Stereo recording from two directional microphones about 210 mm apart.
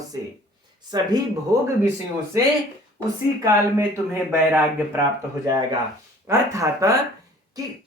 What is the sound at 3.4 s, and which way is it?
Speech, 15° right (ahead or behind).